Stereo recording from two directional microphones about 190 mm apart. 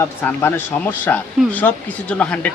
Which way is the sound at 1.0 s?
10° left (ahead or behind).